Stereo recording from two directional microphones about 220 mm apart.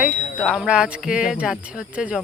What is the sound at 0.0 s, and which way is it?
Speech, 5° right (ahead or behind).